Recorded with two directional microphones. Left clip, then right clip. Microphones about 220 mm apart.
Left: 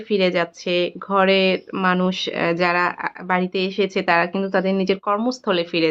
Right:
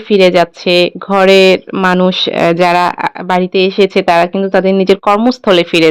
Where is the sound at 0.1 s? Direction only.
35° right (ahead or behind).